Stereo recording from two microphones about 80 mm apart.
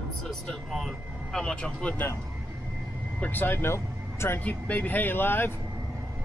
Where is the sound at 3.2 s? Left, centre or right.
Left.